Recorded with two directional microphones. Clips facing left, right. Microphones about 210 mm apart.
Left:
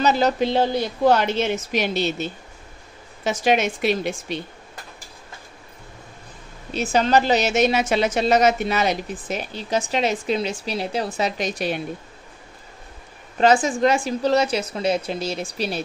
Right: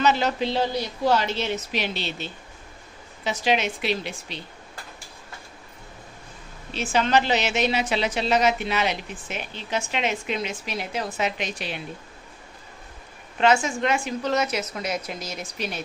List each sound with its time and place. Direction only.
0.0 s a woman's voice: 40° left (ahead or behind)
6.8 s a woman's voice: 40° left (ahead or behind)
13.4 s a woman's voice: 35° left (ahead or behind)